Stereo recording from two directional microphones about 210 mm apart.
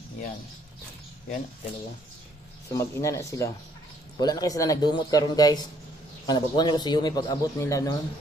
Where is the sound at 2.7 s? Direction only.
15° left (ahead or behind).